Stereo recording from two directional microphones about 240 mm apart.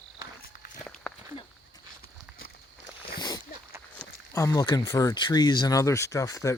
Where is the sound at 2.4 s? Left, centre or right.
Left.